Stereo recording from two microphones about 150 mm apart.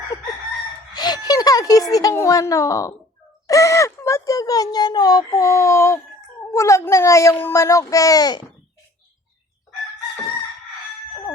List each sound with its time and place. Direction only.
0.1 s chicken: 20° left (ahead or behind)
0.9 s speech: 25° left (ahead or behind)